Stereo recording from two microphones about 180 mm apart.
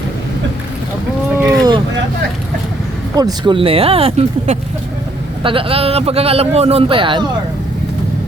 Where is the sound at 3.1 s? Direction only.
25° right (ahead or behind).